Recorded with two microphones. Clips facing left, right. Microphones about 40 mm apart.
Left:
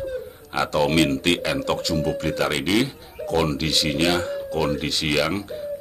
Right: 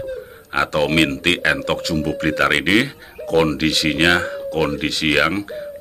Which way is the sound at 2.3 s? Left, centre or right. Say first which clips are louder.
Right 7 dB; right.